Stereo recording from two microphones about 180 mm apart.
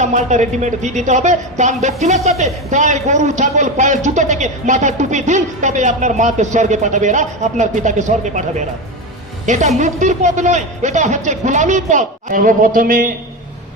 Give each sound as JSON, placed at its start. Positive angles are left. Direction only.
{"t": 0.0, "sound": "a man's voice", "side_deg": -40}
{"t": 9.5, "sound": "a man's voice", "side_deg": -40}